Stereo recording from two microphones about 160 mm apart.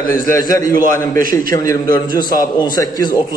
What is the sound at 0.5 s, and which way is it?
A man's voice, 20° left (ahead or behind).